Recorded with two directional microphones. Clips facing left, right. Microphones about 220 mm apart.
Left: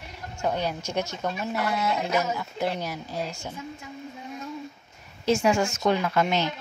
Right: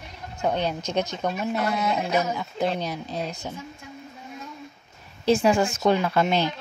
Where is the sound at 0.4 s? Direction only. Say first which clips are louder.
Right 2 dB; 20° right (ahead or behind).